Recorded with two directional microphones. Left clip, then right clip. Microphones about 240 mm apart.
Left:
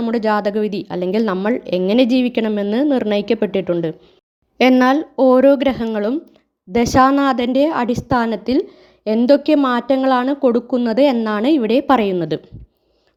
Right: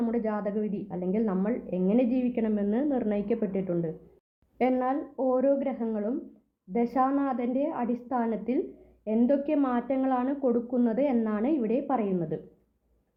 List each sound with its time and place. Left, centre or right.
0.0 s speech: left